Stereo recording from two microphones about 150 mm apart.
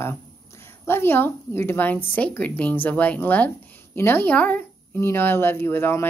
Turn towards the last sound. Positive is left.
turn(degrees=15)  # may be behind; listen again after turning